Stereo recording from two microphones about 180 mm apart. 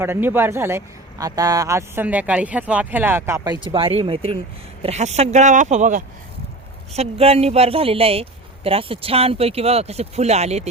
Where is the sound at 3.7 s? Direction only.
30° right (ahead or behind).